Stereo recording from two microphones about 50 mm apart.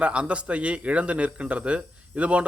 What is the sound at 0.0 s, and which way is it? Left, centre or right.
A man's voice, right.